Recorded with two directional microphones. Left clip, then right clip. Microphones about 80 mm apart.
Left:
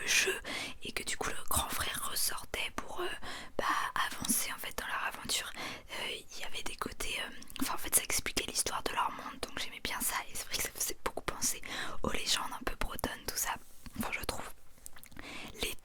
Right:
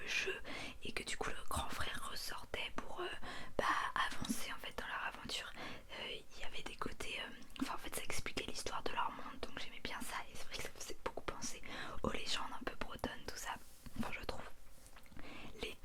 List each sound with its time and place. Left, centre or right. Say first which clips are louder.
0.0 s whispering: left 9 dB; left
4.3 s whispering: left 7 dB; left
11.9 s whispering: left 7 dB; left
15.3 s a sound: left 8 dB; left